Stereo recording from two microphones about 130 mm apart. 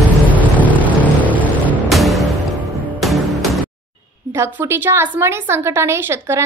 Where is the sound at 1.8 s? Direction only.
Centre (ahead or behind).